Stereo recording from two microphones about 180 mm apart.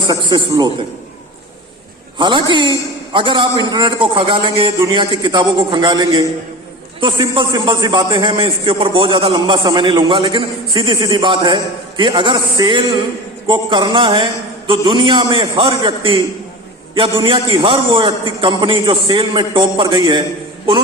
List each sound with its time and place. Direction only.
0.1 s a man's voice: 25° right (ahead or behind)
2.1 s a man's voice: 25° right (ahead or behind)